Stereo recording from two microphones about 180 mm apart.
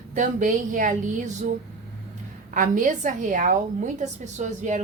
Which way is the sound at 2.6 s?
45° right (ahead or behind).